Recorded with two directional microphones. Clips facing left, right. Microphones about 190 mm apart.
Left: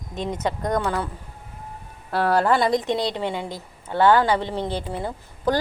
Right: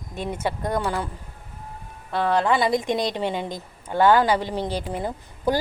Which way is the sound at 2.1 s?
5° left (ahead or behind).